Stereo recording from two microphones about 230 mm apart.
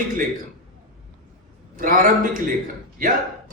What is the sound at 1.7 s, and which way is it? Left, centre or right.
Speech, right.